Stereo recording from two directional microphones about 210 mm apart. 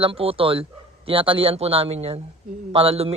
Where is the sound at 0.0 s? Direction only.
25° right (ahead or behind).